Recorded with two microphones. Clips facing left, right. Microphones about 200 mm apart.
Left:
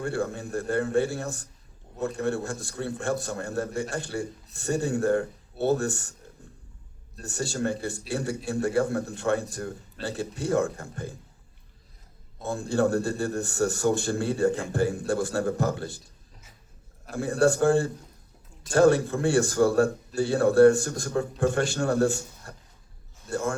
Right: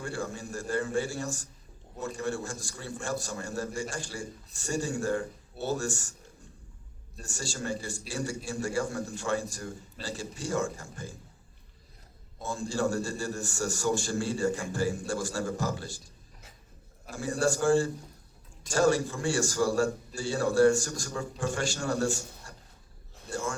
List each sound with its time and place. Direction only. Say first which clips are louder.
0.0 s a man's voice: left 6 dB; 60° left (ahead or behind)
7.2 s a man's voice: left 8 dB; 60° left (ahead or behind)
12.4 s a man's voice: left 5 dB; 60° left (ahead or behind)
17.1 s a man's voice: left 6 dB; 60° left (ahead or behind)